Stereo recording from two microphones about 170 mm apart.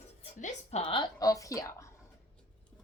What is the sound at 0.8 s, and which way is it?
A woman's voice, 25° left (ahead or behind).